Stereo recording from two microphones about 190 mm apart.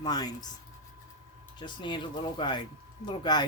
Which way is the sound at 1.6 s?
25° left (ahead or behind).